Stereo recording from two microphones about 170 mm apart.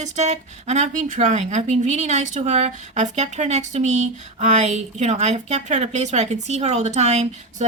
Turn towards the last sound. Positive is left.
turn(degrees=-40)  # may be behind; listen again after turning